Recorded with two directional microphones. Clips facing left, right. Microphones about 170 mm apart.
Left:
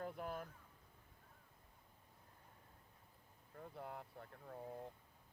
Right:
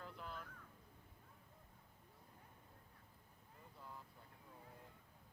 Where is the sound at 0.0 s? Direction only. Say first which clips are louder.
Left 7 dB; 50° left (ahead or behind).